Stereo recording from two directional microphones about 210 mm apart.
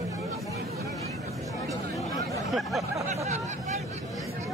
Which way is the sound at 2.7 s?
Centre (ahead or behind).